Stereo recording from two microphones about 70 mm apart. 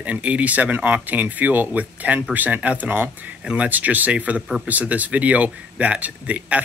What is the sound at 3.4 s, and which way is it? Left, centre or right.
Speech, centre.